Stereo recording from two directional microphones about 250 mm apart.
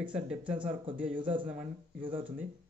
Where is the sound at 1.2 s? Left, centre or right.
Centre.